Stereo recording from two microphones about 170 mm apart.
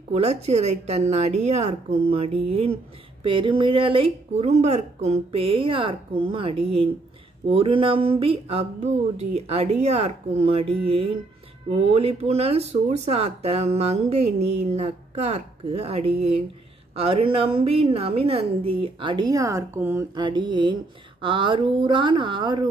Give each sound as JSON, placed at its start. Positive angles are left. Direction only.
{"t": 0.1, "sound": "speech", "side_deg": -40}
{"t": 20.2, "sound": "a woman's voice", "side_deg": -25}